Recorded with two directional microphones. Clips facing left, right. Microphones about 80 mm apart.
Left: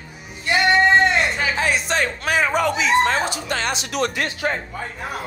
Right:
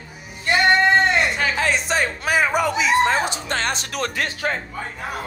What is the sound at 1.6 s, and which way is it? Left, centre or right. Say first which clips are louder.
Speech: even; centre.